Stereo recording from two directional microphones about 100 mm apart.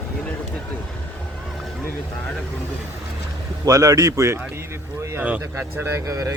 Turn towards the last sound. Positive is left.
turn(degrees=-35)  # may be behind; listen again after turning